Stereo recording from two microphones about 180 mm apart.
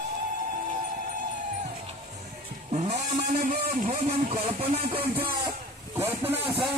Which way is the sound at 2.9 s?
55° right (ahead or behind).